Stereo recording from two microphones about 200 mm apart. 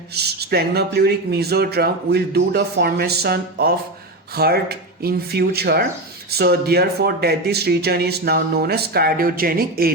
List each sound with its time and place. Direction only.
0.1 s speech: 55° right (ahead or behind)